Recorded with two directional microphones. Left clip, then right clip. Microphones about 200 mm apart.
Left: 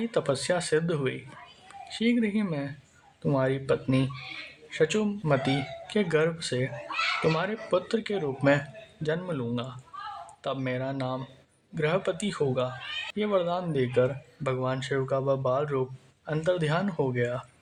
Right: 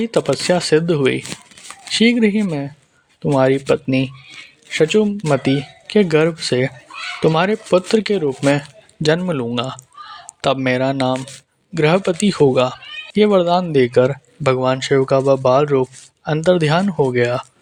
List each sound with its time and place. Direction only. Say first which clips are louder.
0.0 s speech: right 10 dB; 40° right (ahead or behind)